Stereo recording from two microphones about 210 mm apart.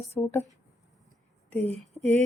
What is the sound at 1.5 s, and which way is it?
Speech, 10° left (ahead or behind).